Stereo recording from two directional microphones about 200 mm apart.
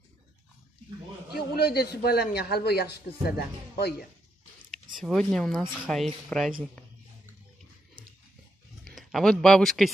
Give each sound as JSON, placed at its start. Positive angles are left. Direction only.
{"t": 1.3, "sound": "a man's voice", "side_deg": 50}
{"t": 5.0, "sound": "speech", "side_deg": 0}
{"t": 8.8, "sound": "speech", "side_deg": 0}